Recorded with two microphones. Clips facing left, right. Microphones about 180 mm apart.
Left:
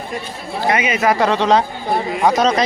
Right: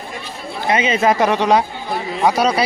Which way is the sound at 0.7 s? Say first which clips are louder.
Right 1 dB; 25° right (ahead or behind).